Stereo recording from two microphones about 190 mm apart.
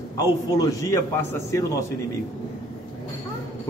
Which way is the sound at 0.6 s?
15° left (ahead or behind).